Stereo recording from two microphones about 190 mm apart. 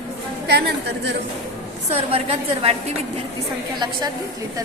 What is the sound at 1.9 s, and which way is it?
A woman's voice, 30° right (ahead or behind).